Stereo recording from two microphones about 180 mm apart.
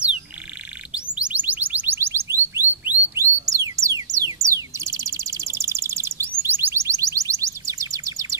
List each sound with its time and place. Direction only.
0.9 s music: 5° right (ahead or behind)